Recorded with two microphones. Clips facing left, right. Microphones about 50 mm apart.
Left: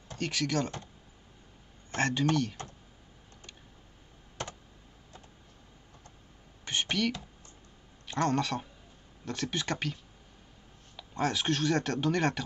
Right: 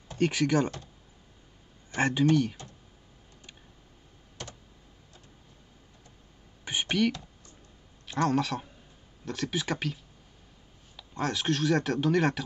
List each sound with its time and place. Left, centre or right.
0.1 s speech: centre
2.0 s speech: centre
2.6 s speech: left
6.6 s a sound: centre
8.1 s speech: centre
11.0 s speech: centre